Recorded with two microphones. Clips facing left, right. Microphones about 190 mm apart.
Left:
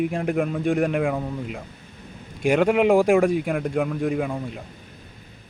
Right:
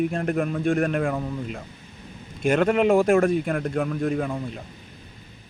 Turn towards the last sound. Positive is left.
turn(degrees=10)  # may be behind; listen again after turning